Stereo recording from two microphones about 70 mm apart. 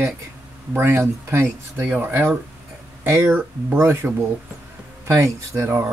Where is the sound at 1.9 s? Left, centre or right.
Right.